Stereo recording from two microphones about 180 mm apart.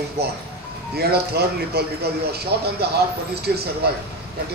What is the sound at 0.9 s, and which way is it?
Speech, 60° right (ahead or behind).